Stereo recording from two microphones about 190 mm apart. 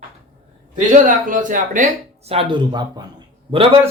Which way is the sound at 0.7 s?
40° right (ahead or behind).